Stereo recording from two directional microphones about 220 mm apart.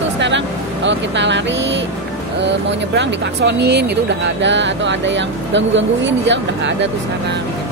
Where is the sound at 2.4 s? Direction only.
50° right (ahead or behind).